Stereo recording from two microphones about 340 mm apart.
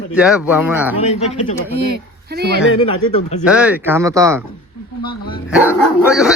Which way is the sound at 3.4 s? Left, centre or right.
Centre.